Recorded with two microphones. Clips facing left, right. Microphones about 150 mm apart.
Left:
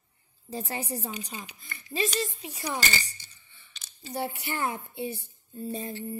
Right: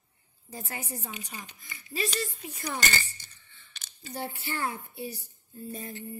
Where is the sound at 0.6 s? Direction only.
30° left (ahead or behind).